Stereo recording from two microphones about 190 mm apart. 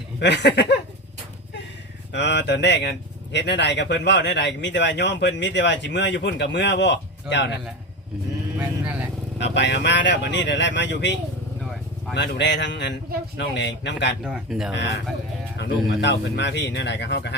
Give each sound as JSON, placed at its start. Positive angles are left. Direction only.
{"t": 0.2, "sound": "speech", "side_deg": 65}
{"t": 2.1, "sound": "speech", "side_deg": 70}
{"t": 8.5, "sound": "speech", "side_deg": -10}
{"t": 9.4, "sound": "speech", "side_deg": 65}
{"t": 11.6, "sound": "vehicle", "side_deg": 0}
{"t": 12.1, "sound": "speech", "side_deg": 65}
{"t": 14.3, "sound": "speech", "side_deg": -5}
{"t": 14.7, "sound": "speech", "side_deg": 65}
{"t": 16.0, "sound": "speech", "side_deg": 65}